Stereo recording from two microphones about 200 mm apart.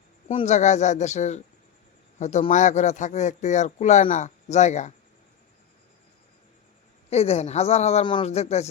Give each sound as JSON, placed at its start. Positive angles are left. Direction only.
{"t": 0.3, "sound": "speech", "side_deg": 35}
{"t": 7.1, "sound": "speech", "side_deg": 30}